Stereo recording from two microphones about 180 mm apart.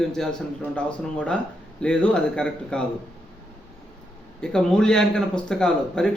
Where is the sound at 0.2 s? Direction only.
5° left (ahead or behind).